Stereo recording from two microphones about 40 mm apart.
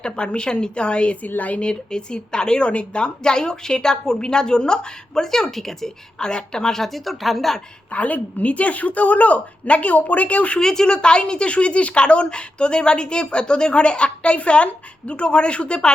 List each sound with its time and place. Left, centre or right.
0.0 s speech: left
1.4 s a woman's voice: left
1.6 s speech: centre
6.1 s a woman's voice: centre
7.9 s a woman's voice: left
10.6 s speech: centre